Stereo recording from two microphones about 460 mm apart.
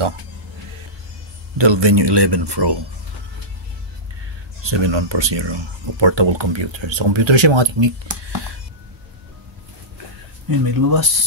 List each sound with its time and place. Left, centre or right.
1.6 s speech: right
4.6 s speech: right
10.5 s speech: right